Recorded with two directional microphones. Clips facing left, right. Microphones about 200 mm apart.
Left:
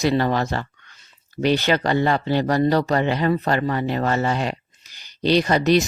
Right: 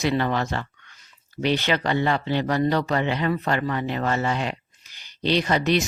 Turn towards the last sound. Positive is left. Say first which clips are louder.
# left 4 dB
turn(degrees=40)  # may be behind; listen again after turning